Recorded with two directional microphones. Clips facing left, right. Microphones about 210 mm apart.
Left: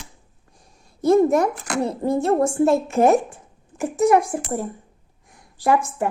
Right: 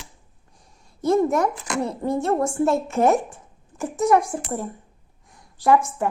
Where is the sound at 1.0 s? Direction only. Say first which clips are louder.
Left 3 dB; 30° left (ahead or behind).